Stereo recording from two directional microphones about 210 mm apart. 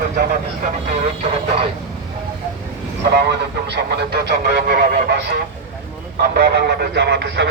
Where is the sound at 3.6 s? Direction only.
50° right (ahead or behind).